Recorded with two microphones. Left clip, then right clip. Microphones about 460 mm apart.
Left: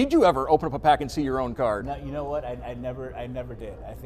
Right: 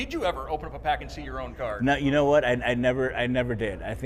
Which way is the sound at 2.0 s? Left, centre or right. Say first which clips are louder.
Right 9 dB; right.